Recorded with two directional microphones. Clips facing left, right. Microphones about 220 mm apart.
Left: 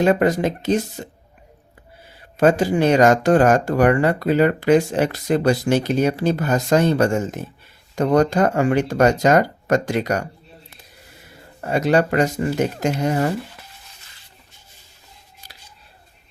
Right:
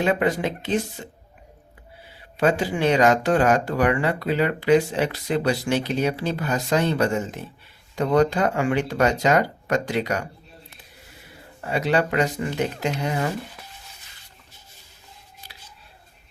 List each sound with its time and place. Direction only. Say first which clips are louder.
0.0 s speech: left 5 dB; 45° left (ahead or behind)
2.4 s speech: left 5 dB; 45° left (ahead or behind)
11.6 s speech: left 4 dB; 45° left (ahead or behind)